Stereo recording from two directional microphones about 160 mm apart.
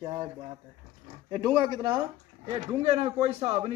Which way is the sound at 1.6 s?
25° right (ahead or behind).